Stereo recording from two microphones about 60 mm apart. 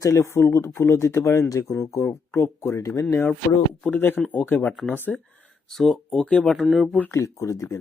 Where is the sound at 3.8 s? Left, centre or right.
Left.